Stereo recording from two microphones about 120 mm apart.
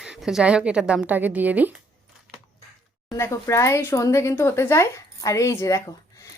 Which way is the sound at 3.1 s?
20° left (ahead or behind).